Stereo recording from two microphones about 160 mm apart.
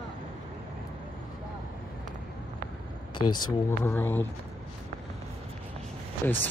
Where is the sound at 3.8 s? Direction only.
15° left (ahead or behind).